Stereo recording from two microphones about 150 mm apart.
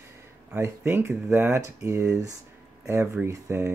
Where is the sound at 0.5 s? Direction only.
15° right (ahead or behind).